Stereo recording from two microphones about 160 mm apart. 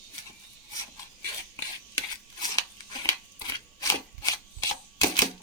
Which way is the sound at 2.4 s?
25° left (ahead or behind).